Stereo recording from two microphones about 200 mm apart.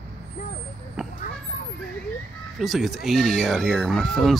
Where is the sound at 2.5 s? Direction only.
Centre (ahead or behind).